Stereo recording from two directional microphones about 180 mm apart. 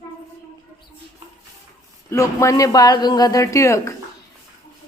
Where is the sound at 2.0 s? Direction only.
15° left (ahead or behind).